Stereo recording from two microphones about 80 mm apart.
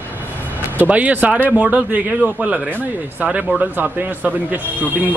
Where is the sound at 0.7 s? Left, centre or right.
Right.